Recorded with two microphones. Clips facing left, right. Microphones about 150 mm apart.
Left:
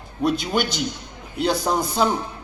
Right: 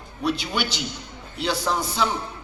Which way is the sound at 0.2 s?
50° left (ahead or behind).